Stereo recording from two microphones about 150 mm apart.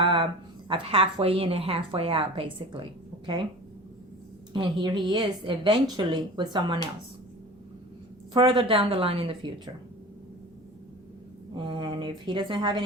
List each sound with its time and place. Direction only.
0.0 s a sound: 35° right (ahead or behind)
0.7 s a woman's voice: 40° right (ahead or behind)
4.5 s a woman's voice: 30° right (ahead or behind)
8.3 s a woman's voice: 30° right (ahead or behind)
11.5 s a woman's voice: 35° right (ahead or behind)